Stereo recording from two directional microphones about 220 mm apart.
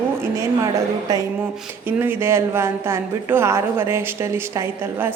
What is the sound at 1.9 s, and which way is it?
Speech, 10° right (ahead or behind).